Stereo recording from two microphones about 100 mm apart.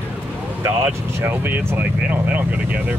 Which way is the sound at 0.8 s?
20° right (ahead or behind).